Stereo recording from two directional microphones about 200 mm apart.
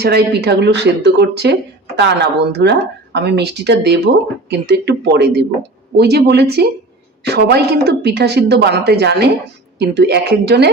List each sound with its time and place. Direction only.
0.0 s speech: 55° right (ahead or behind)